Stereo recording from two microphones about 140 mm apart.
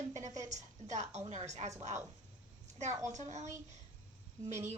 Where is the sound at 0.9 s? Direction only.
55° right (ahead or behind).